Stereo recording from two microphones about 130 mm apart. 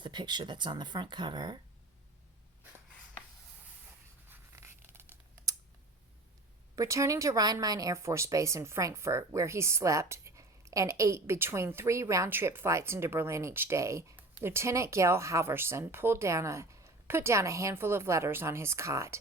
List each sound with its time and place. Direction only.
0.0 s speech: 35° right (ahead or behind)
4.3 s writing: 20° right (ahead or behind)
6.7 s speech: 25° right (ahead or behind)